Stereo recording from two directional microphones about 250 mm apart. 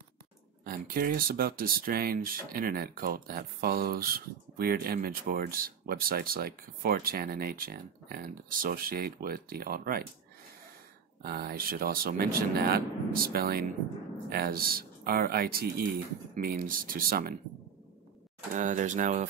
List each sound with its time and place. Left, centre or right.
0.7 s speech: right
11.2 s speech: right
18.5 s speech: right